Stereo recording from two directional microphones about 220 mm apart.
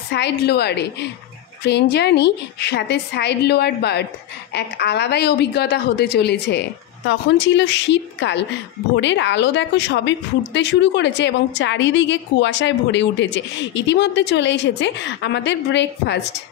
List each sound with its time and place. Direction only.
0.1 s a woman's voice: 50° left (ahead or behind)